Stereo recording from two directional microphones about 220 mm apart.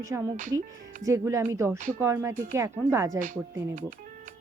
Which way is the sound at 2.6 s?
15° right (ahead or behind).